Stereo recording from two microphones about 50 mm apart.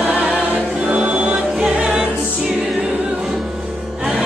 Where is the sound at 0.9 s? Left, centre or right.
Right.